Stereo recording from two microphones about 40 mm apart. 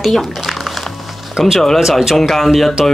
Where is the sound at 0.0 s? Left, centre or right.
Centre.